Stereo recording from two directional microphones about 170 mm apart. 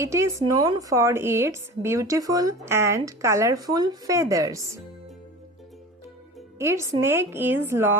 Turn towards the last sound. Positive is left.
turn(degrees=-15)  # may be behind; listen again after turning